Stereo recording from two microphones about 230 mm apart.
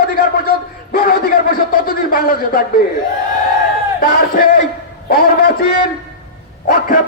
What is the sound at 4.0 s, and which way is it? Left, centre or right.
Speech, left.